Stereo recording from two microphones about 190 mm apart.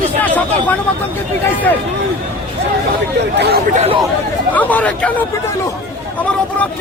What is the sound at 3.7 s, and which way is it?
Speech, 35° right (ahead or behind).